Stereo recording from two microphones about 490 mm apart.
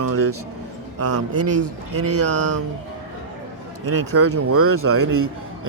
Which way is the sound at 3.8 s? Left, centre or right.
Right.